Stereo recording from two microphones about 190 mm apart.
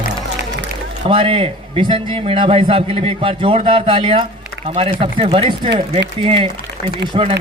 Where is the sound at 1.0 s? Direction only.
30° right (ahead or behind).